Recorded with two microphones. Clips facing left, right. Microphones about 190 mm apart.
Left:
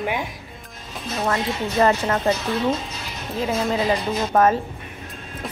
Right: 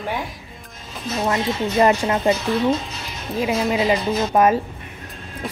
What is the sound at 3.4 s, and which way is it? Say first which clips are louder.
Speech: right 2 dB; 10° right (ahead or behind).